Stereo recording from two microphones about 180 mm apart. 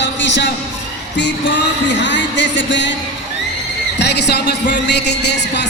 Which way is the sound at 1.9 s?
80° left.